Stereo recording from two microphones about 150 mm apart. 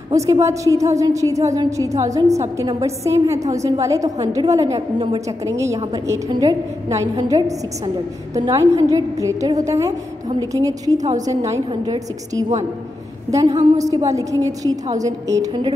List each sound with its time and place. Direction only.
0.1 s a woman's voice: 20° right (ahead or behind)
4.7 s a woman's voice: 30° right (ahead or behind)
6.0 s a woman's voice: 20° right (ahead or behind)